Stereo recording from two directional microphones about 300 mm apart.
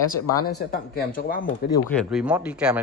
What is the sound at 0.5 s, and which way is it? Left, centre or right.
Speech, left.